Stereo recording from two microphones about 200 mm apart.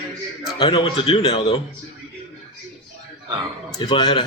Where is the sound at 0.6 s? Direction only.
25° left (ahead or behind).